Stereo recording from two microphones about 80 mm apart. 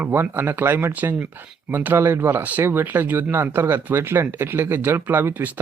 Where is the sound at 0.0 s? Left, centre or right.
Right.